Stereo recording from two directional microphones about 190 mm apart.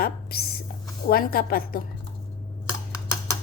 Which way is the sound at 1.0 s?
50° left (ahead or behind).